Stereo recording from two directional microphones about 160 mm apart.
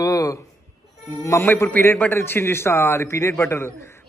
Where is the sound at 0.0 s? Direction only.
20° left (ahead or behind).